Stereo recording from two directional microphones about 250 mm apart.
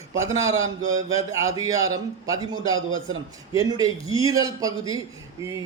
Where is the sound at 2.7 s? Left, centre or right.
Right.